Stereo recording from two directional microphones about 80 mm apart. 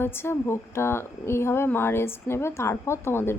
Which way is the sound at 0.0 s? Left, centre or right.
Left.